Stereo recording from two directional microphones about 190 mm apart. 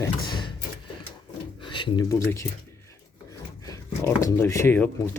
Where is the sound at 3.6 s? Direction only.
15° left (ahead or behind).